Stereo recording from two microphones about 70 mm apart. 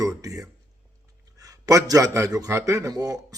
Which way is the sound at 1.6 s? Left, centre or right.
Right.